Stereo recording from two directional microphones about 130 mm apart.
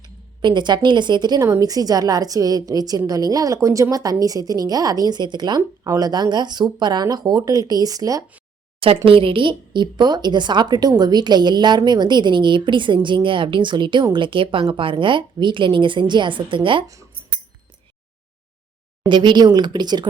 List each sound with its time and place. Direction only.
0.4 s a woman's voice: 35° right (ahead or behind)
9.0 s a woman's voice: 45° right (ahead or behind)
16.8 s a woman's voice: 25° right (ahead or behind)
19.0 s a woman's voice: 35° right (ahead or behind)